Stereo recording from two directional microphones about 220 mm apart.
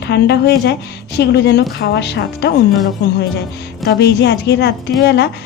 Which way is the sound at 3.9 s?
50° left (ahead or behind).